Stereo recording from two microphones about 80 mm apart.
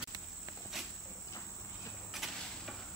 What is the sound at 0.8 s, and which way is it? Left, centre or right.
Cricket, centre.